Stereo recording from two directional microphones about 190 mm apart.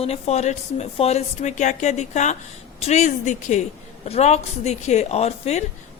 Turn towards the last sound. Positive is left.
turn(degrees=35)  # may be behind; listen again after turning